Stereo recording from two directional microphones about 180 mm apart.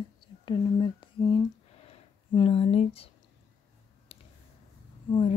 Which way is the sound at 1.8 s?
30° left (ahead or behind).